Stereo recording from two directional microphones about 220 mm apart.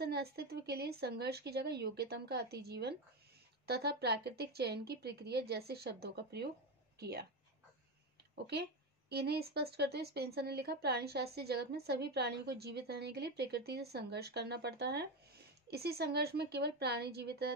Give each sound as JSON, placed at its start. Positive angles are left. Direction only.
{"t": 0.0, "sound": "speech", "side_deg": -45}
{"t": 9.1, "sound": "speech", "side_deg": -45}